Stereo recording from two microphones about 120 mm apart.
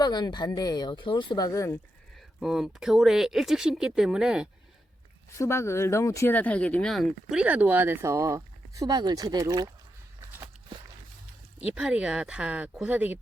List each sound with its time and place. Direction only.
0.0 s speech: 35° left (ahead or behind)
1.5 s speech: 25° left (ahead or behind)
2.4 s speech: 5° right (ahead or behind)
5.4 s speech: 25° left (ahead or behind)
6.3 s speech: 10° left (ahead or behind)
6.9 s speech: centre (ahead or behind); by 9.7 s 30° right (ahead or behind)
11.6 s speech: 10° right (ahead or behind)